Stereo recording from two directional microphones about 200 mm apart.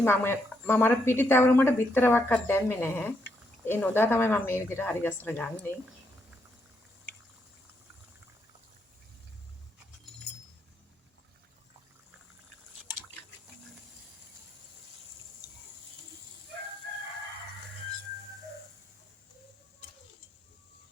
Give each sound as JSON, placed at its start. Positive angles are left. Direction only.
{"t": 0.0, "sound": "a woman's voice", "side_deg": 10}